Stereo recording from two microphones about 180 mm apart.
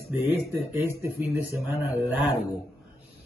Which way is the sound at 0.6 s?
15° right (ahead or behind).